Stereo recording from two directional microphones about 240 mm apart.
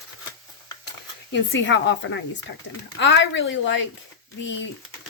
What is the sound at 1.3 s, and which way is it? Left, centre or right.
Speech, left.